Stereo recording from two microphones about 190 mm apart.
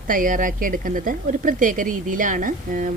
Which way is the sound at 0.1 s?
45° right (ahead or behind).